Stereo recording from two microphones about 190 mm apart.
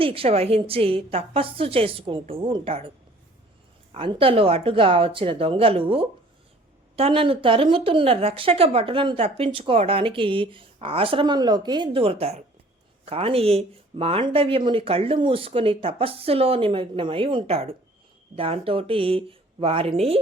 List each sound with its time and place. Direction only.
0.0 s speech: 30° right (ahead or behind)
3.9 s speech: 30° right (ahead or behind)